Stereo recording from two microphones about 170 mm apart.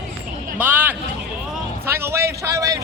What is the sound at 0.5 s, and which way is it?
A man's voice, 10° right (ahead or behind).